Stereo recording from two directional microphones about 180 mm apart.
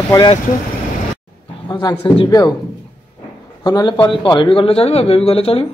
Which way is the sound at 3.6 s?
25° left (ahead or behind).